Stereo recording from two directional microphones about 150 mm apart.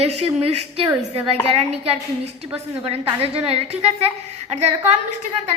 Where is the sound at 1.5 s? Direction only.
45° right (ahead or behind).